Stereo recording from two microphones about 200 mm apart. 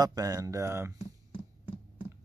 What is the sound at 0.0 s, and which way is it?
Speech, 20° right (ahead or behind).